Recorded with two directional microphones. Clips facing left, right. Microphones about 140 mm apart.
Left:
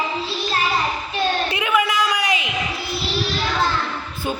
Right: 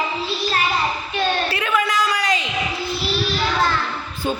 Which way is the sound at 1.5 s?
10° left (ahead or behind).